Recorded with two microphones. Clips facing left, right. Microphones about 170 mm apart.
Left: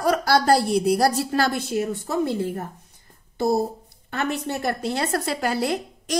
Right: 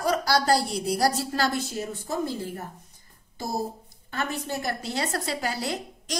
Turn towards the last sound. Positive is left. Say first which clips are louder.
# left 6 dB
turn(degrees=60)  # may be behind; listen again after turning